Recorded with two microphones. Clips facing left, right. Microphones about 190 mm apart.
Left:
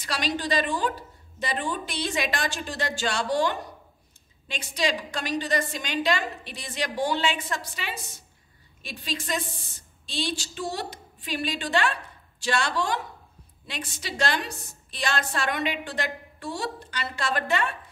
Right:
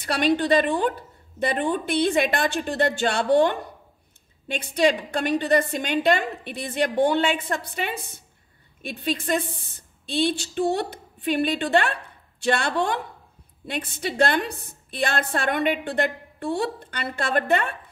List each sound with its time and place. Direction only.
0.0 s a woman's voice: 55° right (ahead or behind)